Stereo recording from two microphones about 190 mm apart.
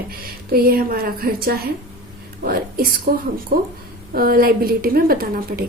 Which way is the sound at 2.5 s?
50° right (ahead or behind).